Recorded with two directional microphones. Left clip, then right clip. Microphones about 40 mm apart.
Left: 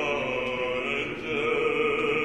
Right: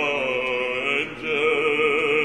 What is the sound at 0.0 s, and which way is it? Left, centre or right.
Chant, right.